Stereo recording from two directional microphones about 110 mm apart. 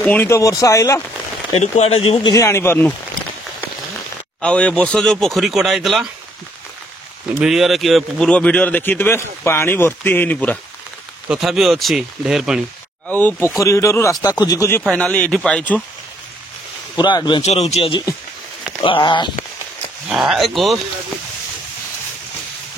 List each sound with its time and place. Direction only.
0.0 s speech: 15° left (ahead or behind)
0.3 s speech: 30° left (ahead or behind)
1.6 s speech: 75° left (ahead or behind)
2.2 s speech: 30° left (ahead or behind)
4.4 s speech: 10° left (ahead or behind)
7.4 s speech: centre (ahead or behind); by 10.6 s 15° left (ahead or behind)
11.2 s speech: 5° right (ahead or behind)
13.6 s speech: 25° left (ahead or behind)
14.9 s speech: 10° left (ahead or behind)
16.9 s speech: 40° left (ahead or behind)
17.4 s speech: 80° left
18.8 s speech: 50° left (ahead or behind)
20.1 s speech: 5° right (ahead or behind)